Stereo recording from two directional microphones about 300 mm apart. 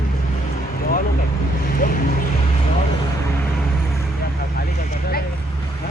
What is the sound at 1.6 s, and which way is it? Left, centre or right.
Speech, left.